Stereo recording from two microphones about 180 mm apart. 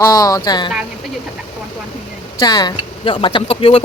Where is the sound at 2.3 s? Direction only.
20° left (ahead or behind).